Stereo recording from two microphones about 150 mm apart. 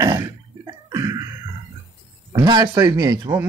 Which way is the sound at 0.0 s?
25° right (ahead or behind).